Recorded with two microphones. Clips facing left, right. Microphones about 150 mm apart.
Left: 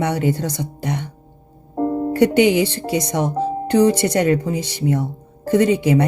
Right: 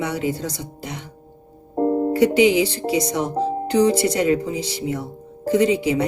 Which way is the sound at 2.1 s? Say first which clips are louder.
Left 2 dB; 55° left (ahead or behind).